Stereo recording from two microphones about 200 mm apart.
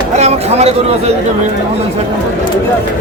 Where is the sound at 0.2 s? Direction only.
30° right (ahead or behind).